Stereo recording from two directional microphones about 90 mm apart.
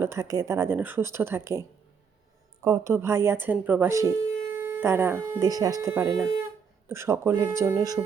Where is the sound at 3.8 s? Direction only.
35° right (ahead or behind).